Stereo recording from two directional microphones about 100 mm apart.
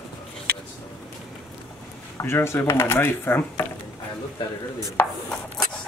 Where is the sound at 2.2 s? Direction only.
25° left (ahead or behind).